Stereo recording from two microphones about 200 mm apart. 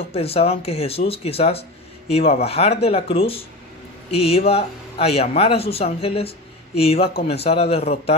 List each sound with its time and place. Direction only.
0.0 s speech: 30° left (ahead or behind)